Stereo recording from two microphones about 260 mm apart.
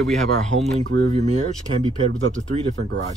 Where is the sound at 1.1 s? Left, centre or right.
Right.